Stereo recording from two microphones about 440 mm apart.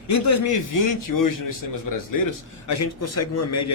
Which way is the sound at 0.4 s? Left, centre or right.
Left.